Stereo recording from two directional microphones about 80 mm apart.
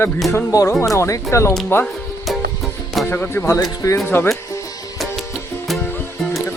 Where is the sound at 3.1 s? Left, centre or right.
Left.